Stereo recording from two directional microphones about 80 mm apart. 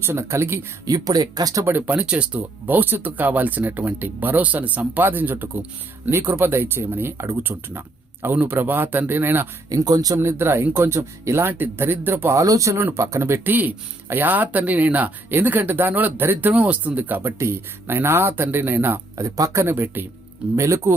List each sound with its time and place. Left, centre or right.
0.0 s speech: right
0.9 s speech: right
1.6 s speech: right
9.6 s speech: right
10.2 s speech: right
12.4 s speech: right
13.5 s speech: right
19.1 s speech: right
19.7 s speech: right
20.6 s speech: right